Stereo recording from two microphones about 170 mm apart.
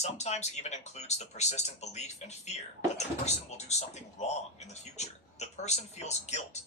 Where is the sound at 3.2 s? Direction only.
40° left (ahead or behind).